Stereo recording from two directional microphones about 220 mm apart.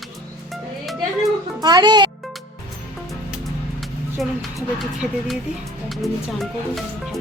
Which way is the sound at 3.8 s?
Centre (ahead or behind).